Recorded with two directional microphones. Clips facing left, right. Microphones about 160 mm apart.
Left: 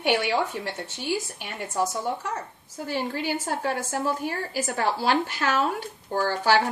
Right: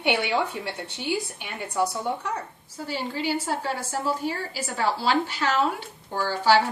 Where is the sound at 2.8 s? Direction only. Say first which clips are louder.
Even; 50° left (ahead or behind).